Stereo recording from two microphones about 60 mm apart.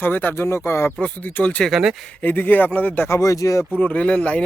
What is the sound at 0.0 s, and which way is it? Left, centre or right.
Speech, left.